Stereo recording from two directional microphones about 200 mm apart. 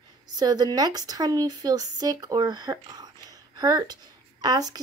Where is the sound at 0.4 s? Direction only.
20° right (ahead or behind).